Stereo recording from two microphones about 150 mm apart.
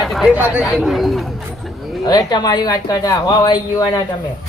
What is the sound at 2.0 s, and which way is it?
Speech, 25° left (ahead or behind).